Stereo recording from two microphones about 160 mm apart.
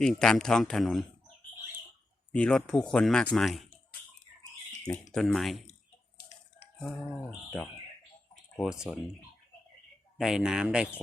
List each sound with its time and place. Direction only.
0.0 s speech: 5° left (ahead or behind)
2.3 s speech: 5° left (ahead or behind)
5.1 s speech: centre (ahead or behind)
8.5 s speech: centre (ahead or behind)
10.2 s speech: 5° right (ahead or behind)